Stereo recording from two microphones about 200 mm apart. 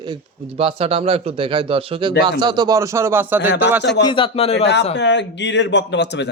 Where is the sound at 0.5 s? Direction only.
30° right (ahead or behind); by 3.4 s 10° right (ahead or behind).